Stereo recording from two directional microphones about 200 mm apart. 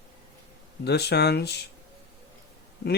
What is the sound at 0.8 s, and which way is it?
Speech, 55° left (ahead or behind).